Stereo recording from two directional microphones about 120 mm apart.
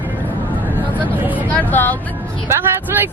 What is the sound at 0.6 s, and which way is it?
Vehicle, 15° right (ahead or behind).